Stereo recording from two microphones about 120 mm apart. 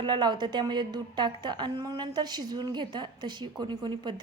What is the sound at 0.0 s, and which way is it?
A woman's voice, 40° right (ahead or behind).